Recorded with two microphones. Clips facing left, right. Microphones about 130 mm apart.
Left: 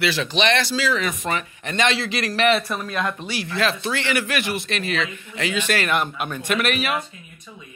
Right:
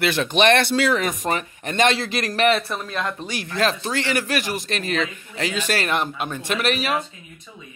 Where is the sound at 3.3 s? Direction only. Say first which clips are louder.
Right 4 dB; 45° right (ahead or behind).